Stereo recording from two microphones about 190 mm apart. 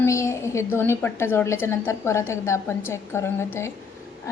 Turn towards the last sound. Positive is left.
turn(degrees=15)  # may be behind; listen again after turning